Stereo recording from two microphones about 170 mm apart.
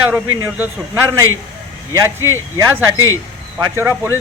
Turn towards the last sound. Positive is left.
turn(degrees=-15)  # may be behind; listen again after turning